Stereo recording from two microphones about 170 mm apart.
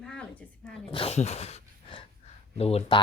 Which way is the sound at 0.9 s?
35° left (ahead or behind).